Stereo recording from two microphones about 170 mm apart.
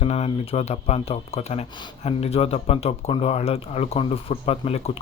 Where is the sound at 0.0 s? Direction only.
35° left (ahead or behind).